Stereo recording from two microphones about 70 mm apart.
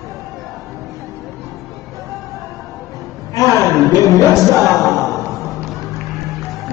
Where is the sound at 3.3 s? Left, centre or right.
Left.